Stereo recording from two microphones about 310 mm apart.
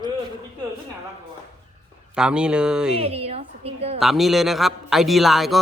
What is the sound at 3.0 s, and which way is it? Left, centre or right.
A woman's voice, centre.